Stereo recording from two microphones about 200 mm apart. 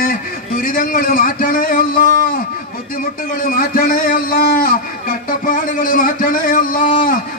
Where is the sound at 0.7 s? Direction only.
45° left (ahead or behind).